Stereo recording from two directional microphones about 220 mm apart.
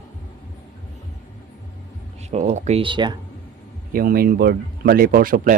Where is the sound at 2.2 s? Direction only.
30° right (ahead or behind).